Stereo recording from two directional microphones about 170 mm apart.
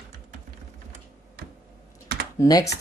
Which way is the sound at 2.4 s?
20° left (ahead or behind).